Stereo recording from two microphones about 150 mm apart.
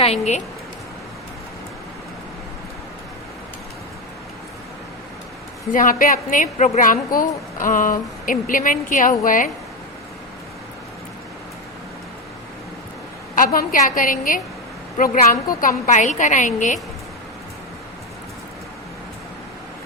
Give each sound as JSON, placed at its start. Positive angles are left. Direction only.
{"t": 0.0, "sound": "speech", "side_deg": 45}
{"t": 5.7, "sound": "a woman's voice", "side_deg": 65}
{"t": 13.3, "sound": "a woman's voice", "side_deg": 70}